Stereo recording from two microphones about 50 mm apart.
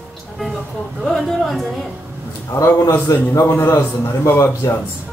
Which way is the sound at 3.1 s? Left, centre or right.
Left.